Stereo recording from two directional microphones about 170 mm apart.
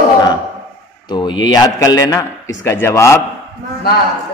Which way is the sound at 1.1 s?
25° left (ahead or behind).